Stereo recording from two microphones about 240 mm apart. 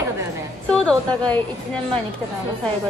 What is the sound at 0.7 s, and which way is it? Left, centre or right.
Speech, centre.